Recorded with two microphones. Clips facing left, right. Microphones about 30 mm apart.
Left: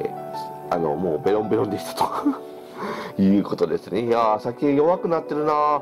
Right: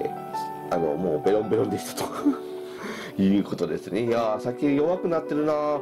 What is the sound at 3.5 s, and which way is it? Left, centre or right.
Speech, left.